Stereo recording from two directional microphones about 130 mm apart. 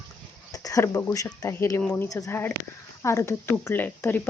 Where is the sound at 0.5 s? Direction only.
25° left (ahead or behind).